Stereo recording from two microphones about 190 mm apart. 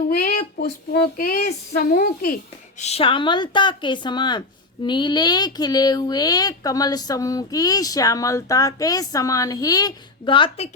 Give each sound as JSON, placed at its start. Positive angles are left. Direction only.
{"t": 0.1, "sound": "speech", "side_deg": 45}